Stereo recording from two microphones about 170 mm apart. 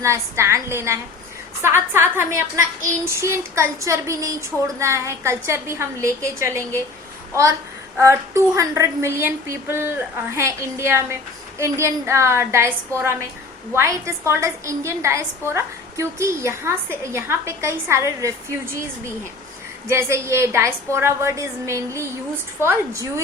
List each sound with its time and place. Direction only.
0.0 s a woman's voice: 15° right (ahead or behind)
7.9 s a woman's voice: 15° right (ahead or behind)
19.9 s a woman's voice: 15° right (ahead or behind)